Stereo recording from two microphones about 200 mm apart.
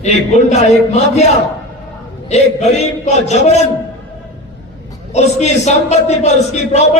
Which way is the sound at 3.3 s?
35° left (ahead or behind).